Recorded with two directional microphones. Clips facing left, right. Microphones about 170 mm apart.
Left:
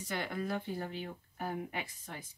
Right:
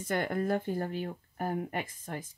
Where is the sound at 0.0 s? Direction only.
50° right (ahead or behind).